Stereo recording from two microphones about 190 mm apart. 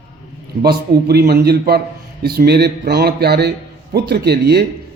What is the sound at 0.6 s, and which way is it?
A man's voice, 55° right (ahead or behind).